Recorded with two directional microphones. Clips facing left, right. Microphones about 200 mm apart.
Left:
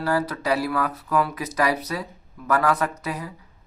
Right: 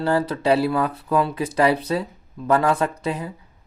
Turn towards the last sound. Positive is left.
turn(degrees=-30)  # may be behind; listen again after turning